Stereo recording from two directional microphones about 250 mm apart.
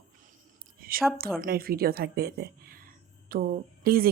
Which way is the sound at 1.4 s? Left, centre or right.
Right.